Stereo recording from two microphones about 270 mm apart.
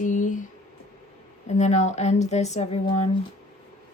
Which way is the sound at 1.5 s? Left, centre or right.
Left.